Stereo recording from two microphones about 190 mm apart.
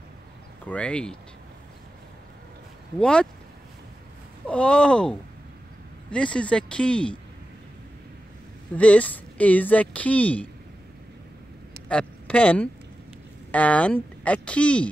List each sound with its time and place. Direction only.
0.7 s speech: 5° left (ahead or behind)
3.0 s speech: 5° left (ahead or behind)
4.5 s speech: 5° left (ahead or behind)
8.7 s a woman's voice: 5° left (ahead or behind)
11.9 s a woman's voice: 5° left (ahead or behind)